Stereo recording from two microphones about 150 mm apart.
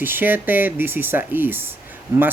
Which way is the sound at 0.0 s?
15° right (ahead or behind).